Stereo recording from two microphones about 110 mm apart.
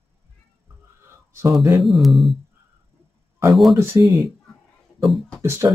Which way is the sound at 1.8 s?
Centre (ahead or behind).